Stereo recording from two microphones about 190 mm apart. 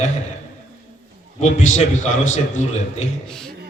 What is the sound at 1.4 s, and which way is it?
A man's voice, 35° left (ahead or behind).